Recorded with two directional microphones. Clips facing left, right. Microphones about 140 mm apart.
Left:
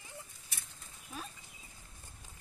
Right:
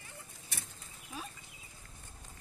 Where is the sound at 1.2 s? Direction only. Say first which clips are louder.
Right 1 dB; 5° right (ahead or behind).